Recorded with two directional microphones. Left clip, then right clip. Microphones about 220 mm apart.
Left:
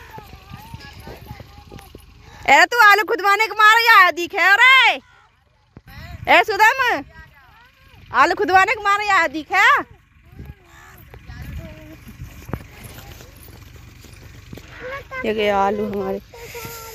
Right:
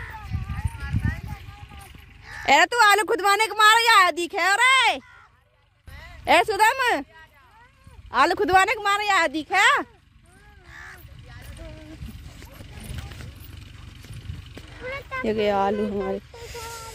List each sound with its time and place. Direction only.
2.4 s a woman's voice: centre (ahead or behind)
5.9 s a sound: 60° right (ahead or behind)
6.2 s a woman's voice: 5° left (ahead or behind)
8.1 s a woman's voice: 5° left (ahead or behind)
10.7 s a sound: 40° left (ahead or behind)
15.2 s a woman's voice: 10° right (ahead or behind)
16.4 s snake: 15° right (ahead or behind)